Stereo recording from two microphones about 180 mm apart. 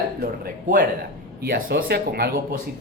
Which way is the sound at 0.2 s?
50° right (ahead or behind).